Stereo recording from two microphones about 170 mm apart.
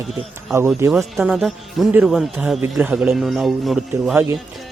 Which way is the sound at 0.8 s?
15° right (ahead or behind).